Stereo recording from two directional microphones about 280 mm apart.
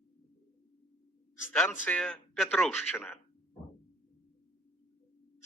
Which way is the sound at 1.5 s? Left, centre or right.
Centre.